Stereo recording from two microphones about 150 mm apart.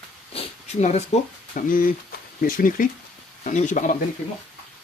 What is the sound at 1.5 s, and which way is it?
Speech, 65° left (ahead or behind).